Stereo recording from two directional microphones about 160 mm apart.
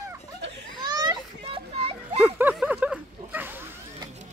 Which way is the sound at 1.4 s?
35° right (ahead or behind).